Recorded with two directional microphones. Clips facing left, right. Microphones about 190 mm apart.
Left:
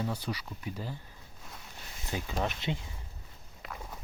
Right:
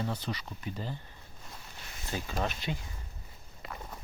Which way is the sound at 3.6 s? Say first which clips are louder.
Even; centre (ahead or behind).